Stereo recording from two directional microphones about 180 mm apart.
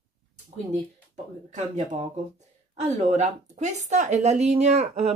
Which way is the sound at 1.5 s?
40° right (ahead or behind).